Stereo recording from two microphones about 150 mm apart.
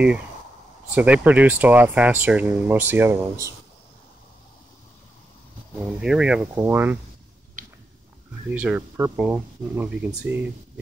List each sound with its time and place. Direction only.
0.9 s speech: 10° right (ahead or behind)
5.9 s speech: 5° right (ahead or behind)
7.6 s a sound: 65° right (ahead or behind)
8.5 s speech: 10° right (ahead or behind)